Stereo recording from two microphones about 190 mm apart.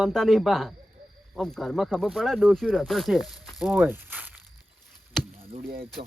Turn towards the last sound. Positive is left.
turn(degrees=-50)  # may be behind; listen again after turning